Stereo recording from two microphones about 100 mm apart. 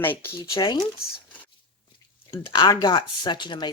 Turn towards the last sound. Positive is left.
turn(degrees=50)  # may be behind; listen again after turning